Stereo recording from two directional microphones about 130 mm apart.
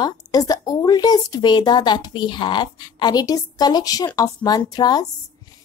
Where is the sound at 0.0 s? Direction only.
30° left (ahead or behind).